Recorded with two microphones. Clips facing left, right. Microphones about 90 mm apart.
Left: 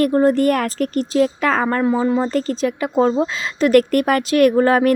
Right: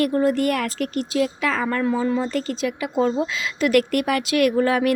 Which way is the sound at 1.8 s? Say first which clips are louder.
Left 4 dB; 25° left (ahead or behind).